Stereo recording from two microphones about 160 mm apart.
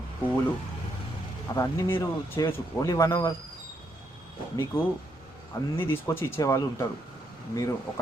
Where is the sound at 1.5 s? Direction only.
20° left (ahead or behind).